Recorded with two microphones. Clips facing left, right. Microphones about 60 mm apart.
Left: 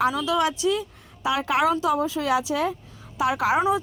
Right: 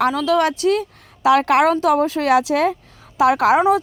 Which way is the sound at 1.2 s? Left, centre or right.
Right.